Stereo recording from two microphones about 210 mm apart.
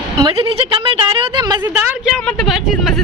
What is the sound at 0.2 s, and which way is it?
A woman's voice, 25° right (ahead or behind).